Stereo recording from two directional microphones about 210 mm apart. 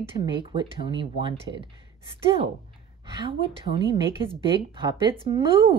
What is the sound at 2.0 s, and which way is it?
Speech, 25° right (ahead or behind).